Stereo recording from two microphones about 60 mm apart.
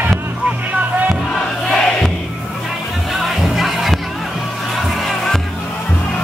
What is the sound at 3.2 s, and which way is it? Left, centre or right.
Music, centre.